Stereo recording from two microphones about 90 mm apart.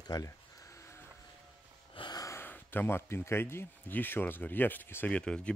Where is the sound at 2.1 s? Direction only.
40° left (ahead or behind).